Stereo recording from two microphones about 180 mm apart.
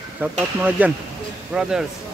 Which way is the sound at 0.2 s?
10° right (ahead or behind).